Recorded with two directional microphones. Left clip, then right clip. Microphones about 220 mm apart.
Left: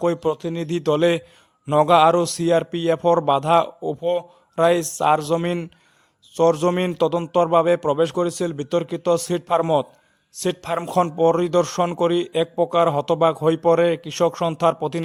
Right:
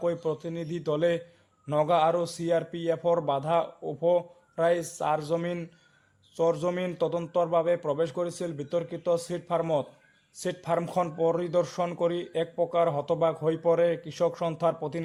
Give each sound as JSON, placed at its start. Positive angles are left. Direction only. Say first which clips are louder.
{"t": 0.0, "sound": "speech", "louder": "left 8 dB", "side_deg": 35}